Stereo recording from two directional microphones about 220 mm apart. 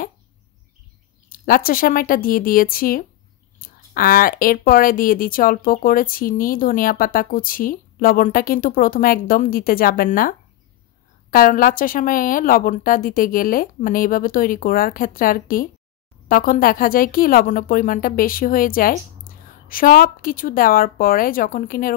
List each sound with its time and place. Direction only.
1.3 s speech: 40° left (ahead or behind)